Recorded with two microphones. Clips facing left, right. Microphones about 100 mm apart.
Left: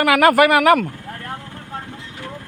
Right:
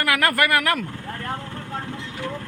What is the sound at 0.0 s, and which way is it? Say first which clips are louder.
Speech: left 8 dB; 80° left.